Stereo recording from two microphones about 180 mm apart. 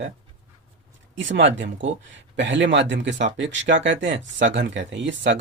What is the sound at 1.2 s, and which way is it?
Speech, 90° right.